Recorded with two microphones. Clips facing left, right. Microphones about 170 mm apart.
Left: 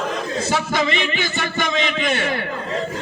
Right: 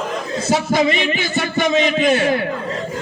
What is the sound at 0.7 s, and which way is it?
A man's voice, 40° right (ahead or behind).